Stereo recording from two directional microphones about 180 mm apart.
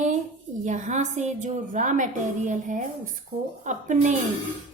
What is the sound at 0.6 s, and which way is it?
A woman's voice, 40° right (ahead or behind).